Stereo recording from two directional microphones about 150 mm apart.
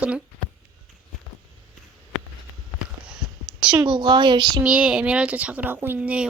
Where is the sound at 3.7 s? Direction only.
30° right (ahead or behind).